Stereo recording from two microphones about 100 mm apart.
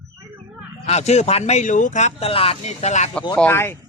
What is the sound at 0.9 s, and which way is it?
Speech, 90° left.